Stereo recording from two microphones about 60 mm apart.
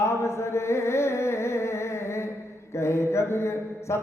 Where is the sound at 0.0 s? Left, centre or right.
Left.